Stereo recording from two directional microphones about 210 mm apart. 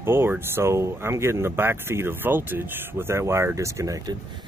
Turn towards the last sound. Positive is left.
turn(degrees=-15)  # may be behind; listen again after turning